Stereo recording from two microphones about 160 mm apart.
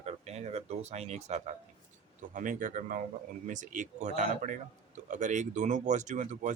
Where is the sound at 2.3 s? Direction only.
55° right (ahead or behind).